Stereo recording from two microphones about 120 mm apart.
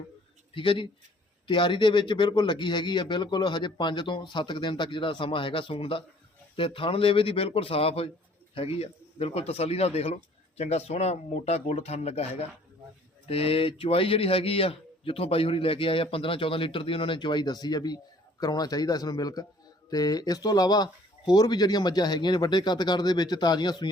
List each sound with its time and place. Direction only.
0.5 s speech: 45° left (ahead or behind)